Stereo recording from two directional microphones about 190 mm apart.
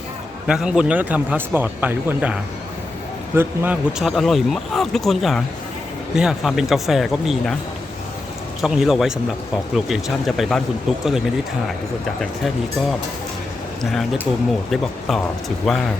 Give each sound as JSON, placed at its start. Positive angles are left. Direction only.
{"t": 0.4, "sound": "speech", "side_deg": -5}
{"t": 8.6, "sound": "speech", "side_deg": 0}
{"t": 14.7, "sound": "speech", "side_deg": 0}